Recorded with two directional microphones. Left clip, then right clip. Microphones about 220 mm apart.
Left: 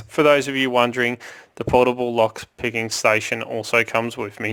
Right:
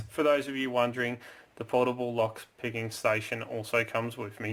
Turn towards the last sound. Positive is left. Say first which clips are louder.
# left 10 dB
turn(degrees=50)  # may be behind; listen again after turning